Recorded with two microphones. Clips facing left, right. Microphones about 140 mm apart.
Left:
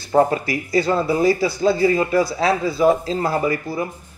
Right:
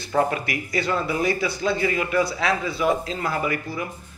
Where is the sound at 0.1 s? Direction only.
35° left (ahead or behind).